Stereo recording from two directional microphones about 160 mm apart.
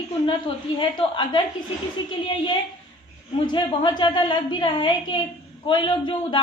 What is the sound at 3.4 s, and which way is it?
A woman's voice, 30° left (ahead or behind).